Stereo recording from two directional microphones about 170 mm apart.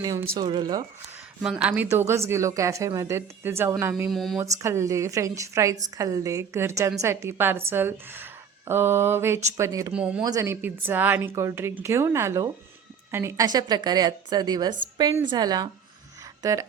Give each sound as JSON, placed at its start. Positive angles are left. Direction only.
{"t": 0.0, "sound": "a woman's voice", "side_deg": -20}
{"t": 1.4, "sound": "speech", "side_deg": -5}
{"t": 4.1, "sound": "speech", "side_deg": 0}
{"t": 4.4, "sound": "a woman's voice", "side_deg": -15}
{"t": 9.9, "sound": "speech", "side_deg": -5}
{"t": 10.2, "sound": "a woman's voice", "side_deg": -20}